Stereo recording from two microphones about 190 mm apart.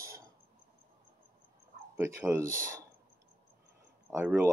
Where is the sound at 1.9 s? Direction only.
15° right (ahead or behind).